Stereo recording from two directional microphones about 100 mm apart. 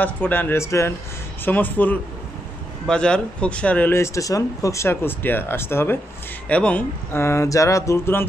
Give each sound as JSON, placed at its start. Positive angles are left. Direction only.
{"t": 0.0, "sound": "speech", "side_deg": 20}
{"t": 1.4, "sound": "speech", "side_deg": 20}
{"t": 3.9, "sound": "speech", "side_deg": 30}
{"t": 6.5, "sound": "speech", "side_deg": 15}
{"t": 7.1, "sound": "speech", "side_deg": 25}